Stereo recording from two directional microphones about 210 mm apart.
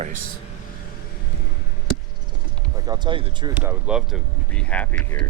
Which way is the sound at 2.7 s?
20° right (ahead or behind).